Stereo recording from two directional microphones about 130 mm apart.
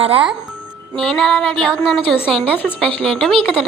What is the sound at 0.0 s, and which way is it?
Speech, 45° right (ahead or behind).